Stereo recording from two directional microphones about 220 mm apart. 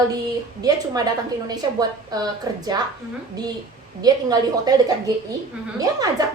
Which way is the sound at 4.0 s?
15° right (ahead or behind).